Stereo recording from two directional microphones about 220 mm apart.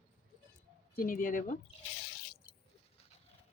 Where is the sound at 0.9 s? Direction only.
40° left (ahead or behind).